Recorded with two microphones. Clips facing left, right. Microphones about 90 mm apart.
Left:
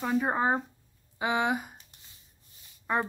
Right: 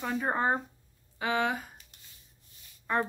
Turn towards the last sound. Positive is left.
turn(degrees=15)  # may be behind; listen again after turning